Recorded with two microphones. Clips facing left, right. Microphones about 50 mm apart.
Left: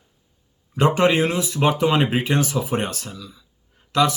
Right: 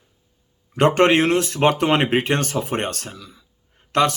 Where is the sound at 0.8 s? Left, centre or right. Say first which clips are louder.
Right 2 dB; right.